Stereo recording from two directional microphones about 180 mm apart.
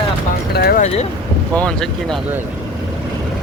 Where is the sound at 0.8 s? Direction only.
35° left (ahead or behind).